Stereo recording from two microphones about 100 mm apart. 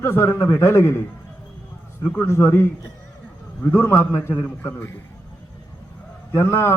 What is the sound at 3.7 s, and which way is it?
A man's voice, 25° left (ahead or behind).